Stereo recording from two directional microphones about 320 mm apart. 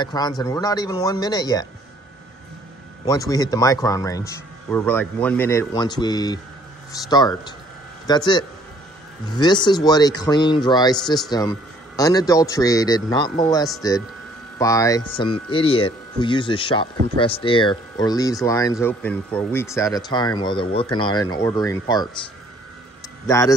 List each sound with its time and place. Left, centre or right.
0.0 s speech: centre
3.1 s speech: centre
9.4 s speech: centre
23.2 s speech: centre